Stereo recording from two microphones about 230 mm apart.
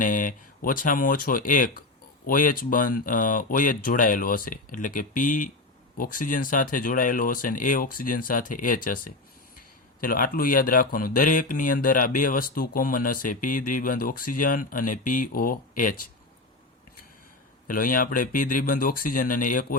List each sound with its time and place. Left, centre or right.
0.0 s speech: left
17.7 s speech: left